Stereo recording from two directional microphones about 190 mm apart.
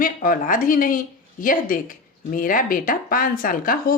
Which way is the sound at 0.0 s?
45° left (ahead or behind).